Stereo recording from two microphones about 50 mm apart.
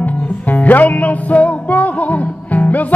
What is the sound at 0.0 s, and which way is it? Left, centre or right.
Music, left.